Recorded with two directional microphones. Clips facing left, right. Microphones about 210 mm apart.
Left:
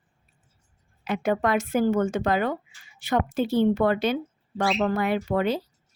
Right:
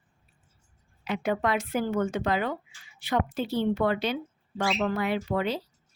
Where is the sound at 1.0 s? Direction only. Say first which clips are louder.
Left 3 dB; 45° left (ahead or behind).